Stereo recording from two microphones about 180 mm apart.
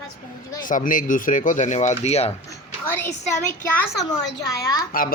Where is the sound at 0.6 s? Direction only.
45° left (ahead or behind).